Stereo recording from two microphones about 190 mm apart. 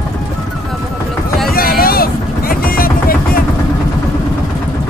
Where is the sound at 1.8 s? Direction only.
50° left (ahead or behind).